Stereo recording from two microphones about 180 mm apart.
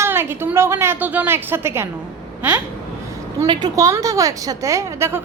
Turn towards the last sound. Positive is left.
turn(degrees=-15)  # may be behind; listen again after turning